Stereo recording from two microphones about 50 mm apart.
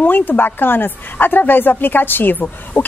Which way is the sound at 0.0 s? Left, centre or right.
Left.